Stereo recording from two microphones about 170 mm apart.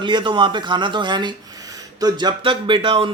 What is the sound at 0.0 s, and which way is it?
Speech, 30° right (ahead or behind).